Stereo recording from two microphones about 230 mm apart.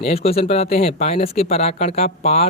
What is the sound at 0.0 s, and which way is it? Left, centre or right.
Speech, left.